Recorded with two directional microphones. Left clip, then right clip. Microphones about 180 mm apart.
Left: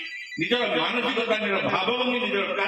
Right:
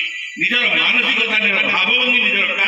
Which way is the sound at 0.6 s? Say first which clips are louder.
Right 10 dB; 50° left (ahead or behind).